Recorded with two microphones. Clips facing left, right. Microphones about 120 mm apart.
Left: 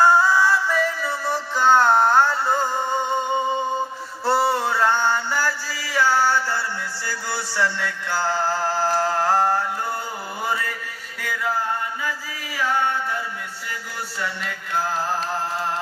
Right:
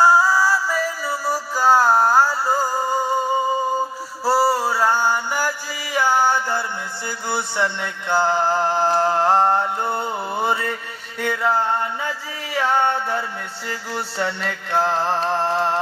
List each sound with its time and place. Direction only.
0.0 s music: 5° right (ahead or behind); by 15.6 s 30° right (ahead or behind)